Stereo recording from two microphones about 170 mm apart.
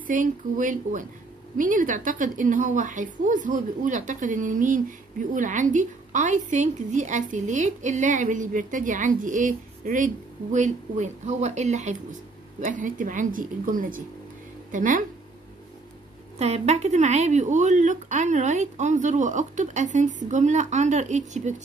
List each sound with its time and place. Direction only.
0.0 s a woman's voice: 50° right (ahead or behind)
16.3 s a woman's voice: 40° right (ahead or behind)